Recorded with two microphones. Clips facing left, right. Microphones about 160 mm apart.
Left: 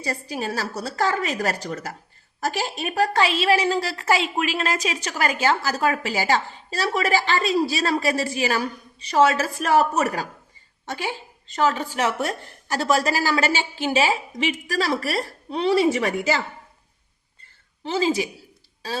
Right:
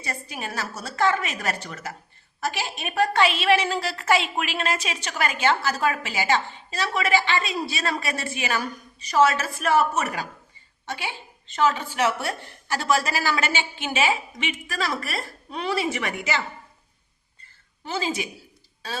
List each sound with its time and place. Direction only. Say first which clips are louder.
0.0 s a woman's voice: left 6 dB; 30° left (ahead or behind)
17.8 s a woman's voice: left 6 dB; 30° left (ahead or behind)